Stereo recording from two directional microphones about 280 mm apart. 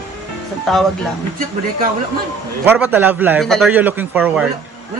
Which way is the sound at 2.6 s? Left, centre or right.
Centre.